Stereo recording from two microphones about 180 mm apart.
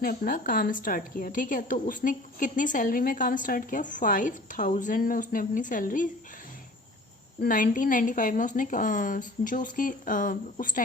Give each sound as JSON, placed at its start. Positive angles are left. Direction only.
{"t": 0.0, "sound": "a woman's voice", "side_deg": 50}
{"t": 7.4, "sound": "a woman's voice", "side_deg": 50}